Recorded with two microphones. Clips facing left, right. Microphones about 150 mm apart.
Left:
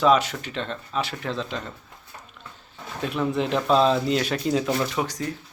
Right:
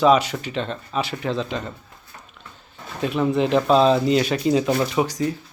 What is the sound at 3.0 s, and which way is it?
A man's voice, 5° right (ahead or behind).